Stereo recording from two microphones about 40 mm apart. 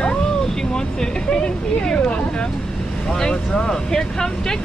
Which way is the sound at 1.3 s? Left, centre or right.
Left.